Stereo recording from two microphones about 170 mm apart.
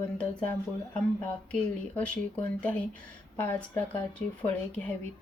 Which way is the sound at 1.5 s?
5° left (ahead or behind).